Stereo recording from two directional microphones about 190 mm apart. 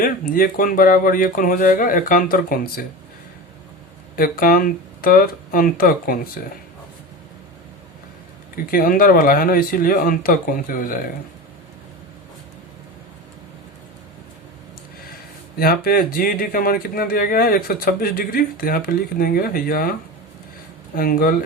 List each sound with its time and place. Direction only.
0.0 s speech: 50° left (ahead or behind)
4.1 s speech: 50° left (ahead or behind)
8.7 s speech: 50° left (ahead or behind)
15.5 s speech: 55° left (ahead or behind)
20.9 s speech: 50° left (ahead or behind)